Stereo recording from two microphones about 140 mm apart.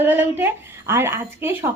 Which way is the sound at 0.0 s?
15° right (ahead or behind).